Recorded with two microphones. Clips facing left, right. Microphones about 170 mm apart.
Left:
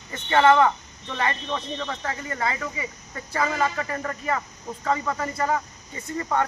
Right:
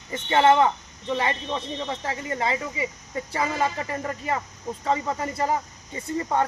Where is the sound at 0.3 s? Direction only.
20° right (ahead or behind).